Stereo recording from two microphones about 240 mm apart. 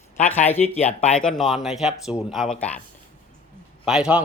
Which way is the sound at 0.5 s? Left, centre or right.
Left.